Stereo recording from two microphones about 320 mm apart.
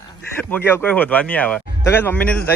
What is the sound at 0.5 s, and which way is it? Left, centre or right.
Speech, centre.